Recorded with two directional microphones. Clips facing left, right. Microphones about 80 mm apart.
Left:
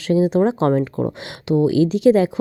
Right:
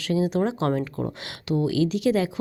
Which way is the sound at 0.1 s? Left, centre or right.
Left.